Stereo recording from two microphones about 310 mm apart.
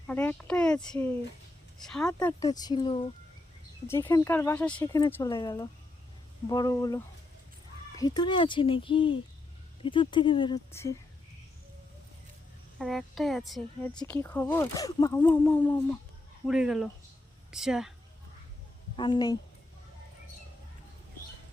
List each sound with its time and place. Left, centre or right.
0.1 s speech: centre
2.1 s speech: centre
12.8 s speech: centre
18.9 s speech: centre